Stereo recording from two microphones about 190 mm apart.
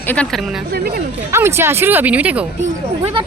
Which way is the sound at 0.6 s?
50° right (ahead or behind).